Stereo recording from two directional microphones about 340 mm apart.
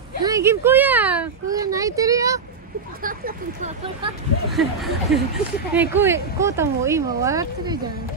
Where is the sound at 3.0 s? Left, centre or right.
Right.